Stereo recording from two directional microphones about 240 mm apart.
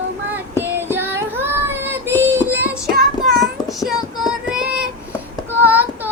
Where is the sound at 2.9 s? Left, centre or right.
Right.